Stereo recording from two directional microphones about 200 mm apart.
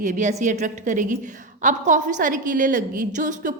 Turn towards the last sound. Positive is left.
turn(degrees=-40)  # may be behind; listen again after turning